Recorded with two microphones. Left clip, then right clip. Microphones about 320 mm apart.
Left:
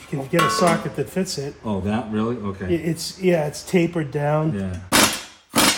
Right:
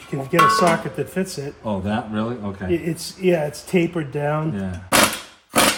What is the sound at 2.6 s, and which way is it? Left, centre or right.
Speech, centre.